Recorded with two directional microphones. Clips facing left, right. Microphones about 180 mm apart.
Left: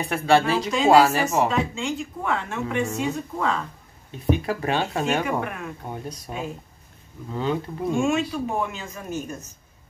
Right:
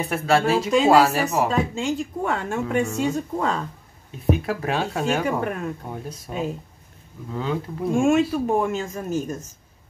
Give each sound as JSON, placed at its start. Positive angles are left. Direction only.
{"t": 0.0, "sound": "speech", "side_deg": 0}
{"t": 1.5, "sound": "speech", "side_deg": -40}
{"t": 2.8, "sound": "speech", "side_deg": 0}
{"t": 3.1, "sound": "speech", "side_deg": -40}
{"t": 4.1, "sound": "speech", "side_deg": 0}
{"t": 5.4, "sound": "speech", "side_deg": -40}
{"t": 5.9, "sound": "speech", "side_deg": 0}
{"t": 7.9, "sound": "speech", "side_deg": -50}